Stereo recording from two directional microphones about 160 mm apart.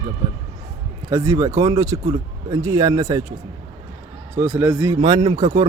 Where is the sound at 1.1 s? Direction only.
20° right (ahead or behind).